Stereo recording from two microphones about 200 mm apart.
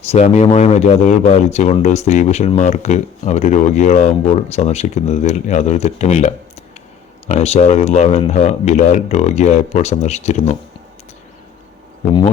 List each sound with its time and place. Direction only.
0.1 s speech: 35° left (ahead or behind)